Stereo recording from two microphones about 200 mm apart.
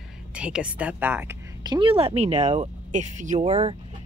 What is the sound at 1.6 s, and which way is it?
Speech, 25° right (ahead or behind).